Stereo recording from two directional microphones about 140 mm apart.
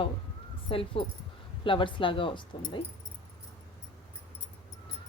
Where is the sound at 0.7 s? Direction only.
40° left (ahead or behind).